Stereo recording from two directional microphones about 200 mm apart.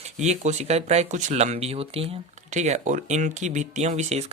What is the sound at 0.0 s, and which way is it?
Speech, 35° right (ahead or behind).